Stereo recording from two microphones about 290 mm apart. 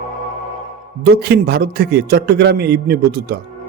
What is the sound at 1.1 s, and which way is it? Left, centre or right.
A man's voice, right.